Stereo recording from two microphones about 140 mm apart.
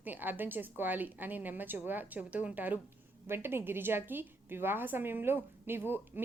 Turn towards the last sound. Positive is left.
turn(degrees=-15)  # may be behind; listen again after turning